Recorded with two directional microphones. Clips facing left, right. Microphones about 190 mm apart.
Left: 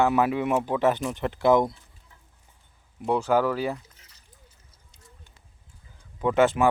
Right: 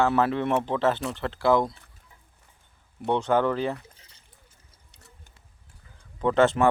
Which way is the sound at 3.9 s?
30° right (ahead or behind).